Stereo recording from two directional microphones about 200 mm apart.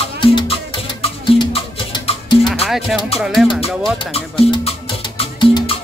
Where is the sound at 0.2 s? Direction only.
25° left (ahead or behind).